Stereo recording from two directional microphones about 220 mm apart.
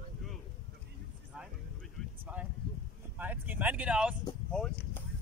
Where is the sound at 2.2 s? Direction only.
5° right (ahead or behind).